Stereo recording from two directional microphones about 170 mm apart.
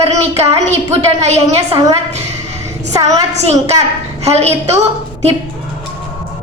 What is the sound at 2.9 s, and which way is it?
Speech, 20° right (ahead or behind).